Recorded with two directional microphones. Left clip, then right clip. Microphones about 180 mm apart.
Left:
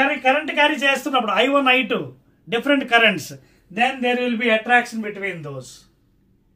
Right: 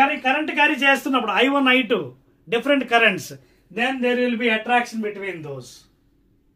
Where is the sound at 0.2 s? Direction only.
25° right (ahead or behind); by 3.9 s 10° right (ahead or behind).